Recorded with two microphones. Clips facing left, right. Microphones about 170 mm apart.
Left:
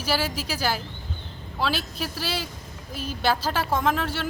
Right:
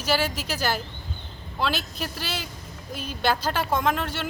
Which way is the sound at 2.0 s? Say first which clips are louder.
Left 2 dB; 5° left (ahead or behind).